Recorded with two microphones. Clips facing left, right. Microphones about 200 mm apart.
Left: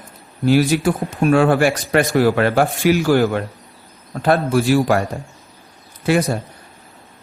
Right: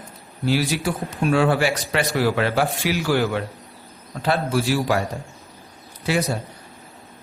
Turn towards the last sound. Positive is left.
turn(degrees=55)  # may be behind; listen again after turning